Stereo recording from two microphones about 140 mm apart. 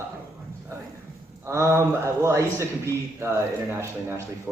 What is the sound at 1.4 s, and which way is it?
A man's voice, 20° right (ahead or behind).